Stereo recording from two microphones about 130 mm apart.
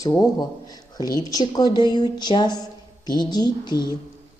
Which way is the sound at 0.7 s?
30° left (ahead or behind).